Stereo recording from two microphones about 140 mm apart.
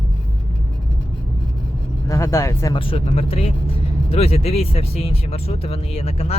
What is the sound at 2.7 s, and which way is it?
Speech, 40° left (ahead or behind).